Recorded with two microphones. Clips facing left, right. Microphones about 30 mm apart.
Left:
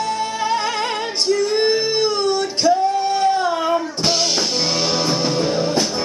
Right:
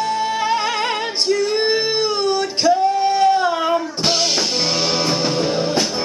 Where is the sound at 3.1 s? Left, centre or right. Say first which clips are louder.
Right 2 dB; right.